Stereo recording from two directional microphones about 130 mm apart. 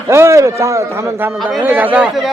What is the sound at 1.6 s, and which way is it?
Speech, 15° right (ahead or behind).